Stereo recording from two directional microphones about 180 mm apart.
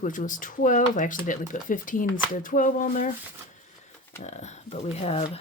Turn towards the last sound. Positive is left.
turn(degrees=35)  # may be behind; listen again after turning